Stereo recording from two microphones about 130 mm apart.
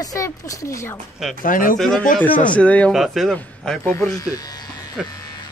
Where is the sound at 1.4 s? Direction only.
90° left.